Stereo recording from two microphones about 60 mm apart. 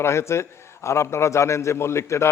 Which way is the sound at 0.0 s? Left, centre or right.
Left.